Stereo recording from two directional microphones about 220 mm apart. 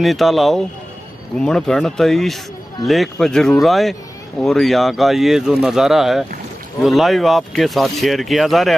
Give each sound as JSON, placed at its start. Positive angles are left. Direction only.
{"t": 0.0, "sound": "speech", "side_deg": 0}